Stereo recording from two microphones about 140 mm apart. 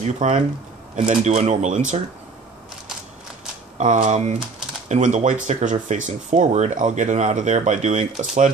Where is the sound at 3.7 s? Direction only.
60° right (ahead or behind).